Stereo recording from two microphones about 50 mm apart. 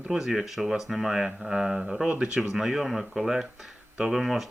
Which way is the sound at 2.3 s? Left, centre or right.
Centre.